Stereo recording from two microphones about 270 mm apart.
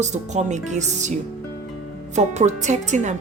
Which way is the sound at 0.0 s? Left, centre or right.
Right.